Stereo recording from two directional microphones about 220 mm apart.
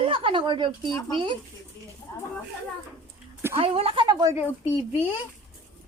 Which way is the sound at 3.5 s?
25° right (ahead or behind).